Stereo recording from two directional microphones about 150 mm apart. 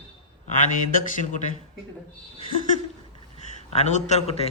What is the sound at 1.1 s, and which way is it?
Speech, 60° left (ahead or behind).